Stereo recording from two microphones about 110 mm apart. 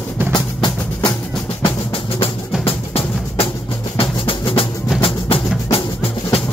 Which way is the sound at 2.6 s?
65° left (ahead or behind).